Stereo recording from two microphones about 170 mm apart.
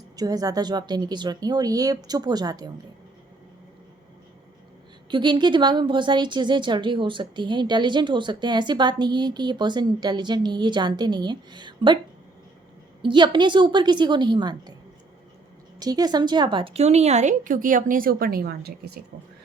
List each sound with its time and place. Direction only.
0.2 s a woman's voice: 20° right (ahead or behind)
5.1 s a woman's voice: 25° right (ahead or behind)
13.0 s a woman's voice: 30° right (ahead or behind)
15.8 s speech: 20° right (ahead or behind); by 18.9 s 65° right (ahead or behind)